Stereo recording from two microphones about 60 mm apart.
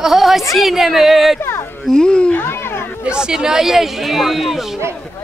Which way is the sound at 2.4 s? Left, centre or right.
Left.